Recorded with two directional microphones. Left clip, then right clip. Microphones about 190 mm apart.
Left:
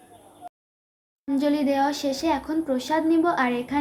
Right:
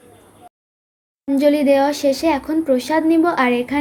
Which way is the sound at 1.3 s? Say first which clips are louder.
Right 9 dB; 20° right (ahead or behind).